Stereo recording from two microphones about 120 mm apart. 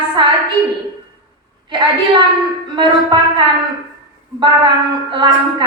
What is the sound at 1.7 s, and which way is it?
Speech, 40° right (ahead or behind).